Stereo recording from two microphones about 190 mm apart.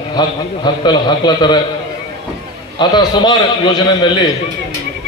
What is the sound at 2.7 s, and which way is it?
A man's voice, 25° left (ahead or behind).